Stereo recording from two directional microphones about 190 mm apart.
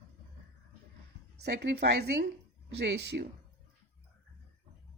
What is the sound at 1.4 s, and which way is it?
A woman's voice, 60° right (ahead or behind).